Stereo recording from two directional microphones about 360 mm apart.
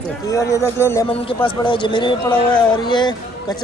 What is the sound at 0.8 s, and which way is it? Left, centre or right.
A man's voice, centre.